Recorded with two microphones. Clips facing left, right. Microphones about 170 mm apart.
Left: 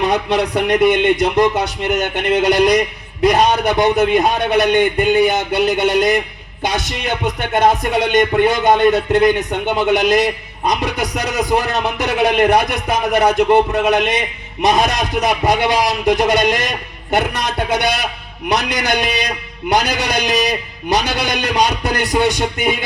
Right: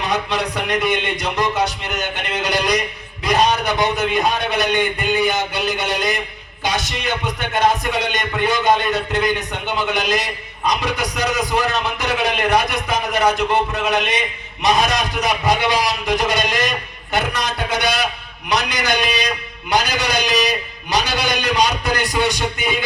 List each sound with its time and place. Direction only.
0.0 s speech: 55° left (ahead or behind)